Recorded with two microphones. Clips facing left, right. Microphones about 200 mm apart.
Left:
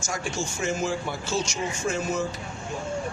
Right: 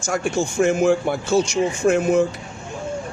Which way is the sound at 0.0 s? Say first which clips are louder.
Right 9 dB; 55° right (ahead or behind).